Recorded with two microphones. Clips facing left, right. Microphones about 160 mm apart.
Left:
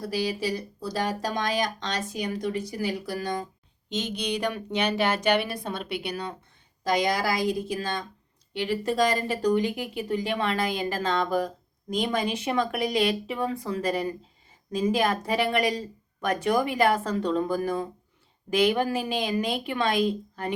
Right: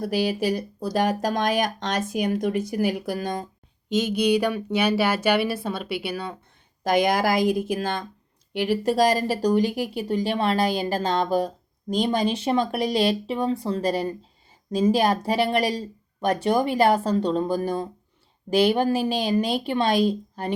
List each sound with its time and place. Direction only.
0.0 s speech: 55° right (ahead or behind)
3.8 s speech: 10° right (ahead or behind)
6.8 s speech: 55° right (ahead or behind); by 20.5 s 35° right (ahead or behind)